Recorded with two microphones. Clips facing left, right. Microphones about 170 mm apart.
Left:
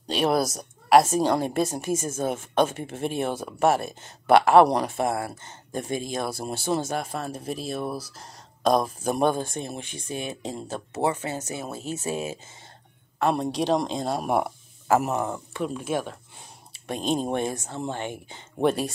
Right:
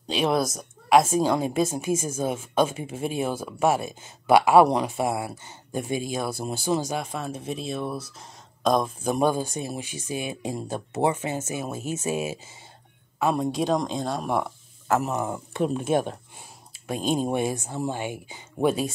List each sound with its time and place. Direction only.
0.1 s a woman's voice: 5° left (ahead or behind); by 12.4 s 15° right (ahead or behind)
13.2 s a woman's voice: centre (ahead or behind)
15.5 s speech: 25° right (ahead or behind)
16.8 s speech: 5° right (ahead or behind)